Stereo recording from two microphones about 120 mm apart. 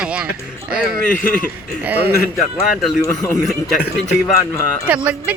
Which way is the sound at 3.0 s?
25° left (ahead or behind).